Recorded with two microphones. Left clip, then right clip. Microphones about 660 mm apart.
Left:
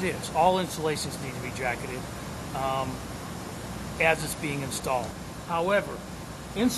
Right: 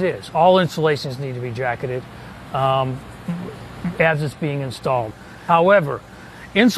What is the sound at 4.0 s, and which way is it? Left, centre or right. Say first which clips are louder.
Speech: right 6 dB; right.